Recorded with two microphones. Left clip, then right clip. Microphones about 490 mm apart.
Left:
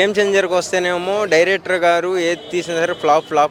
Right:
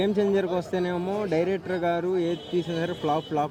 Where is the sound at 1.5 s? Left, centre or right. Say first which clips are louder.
Left 11 dB; centre.